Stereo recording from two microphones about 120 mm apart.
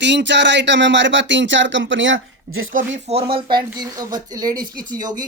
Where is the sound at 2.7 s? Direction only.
75° right (ahead or behind).